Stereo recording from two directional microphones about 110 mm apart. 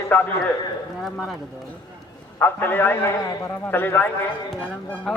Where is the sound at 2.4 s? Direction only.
20° left (ahead or behind).